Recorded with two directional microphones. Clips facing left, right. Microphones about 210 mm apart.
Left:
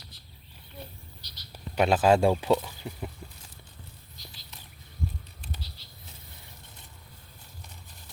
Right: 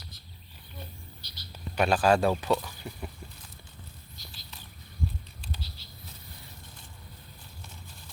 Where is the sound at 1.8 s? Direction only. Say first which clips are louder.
Left 2 dB; 20° left (ahead or behind).